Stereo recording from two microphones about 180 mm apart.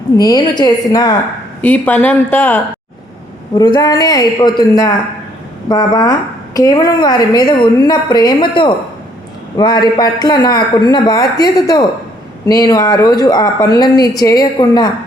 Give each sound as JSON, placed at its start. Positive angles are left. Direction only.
{"t": 0.2, "sound": "a woman's voice", "side_deg": 20}
{"t": 1.6, "sound": "speech", "side_deg": 10}
{"t": 3.5, "sound": "a woman's voice", "side_deg": 25}